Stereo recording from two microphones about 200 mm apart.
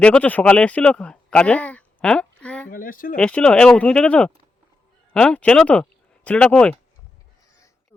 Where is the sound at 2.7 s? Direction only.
45° left (ahead or behind).